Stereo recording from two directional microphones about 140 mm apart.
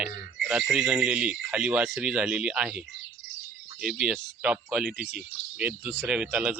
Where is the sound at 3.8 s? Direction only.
5° right (ahead or behind).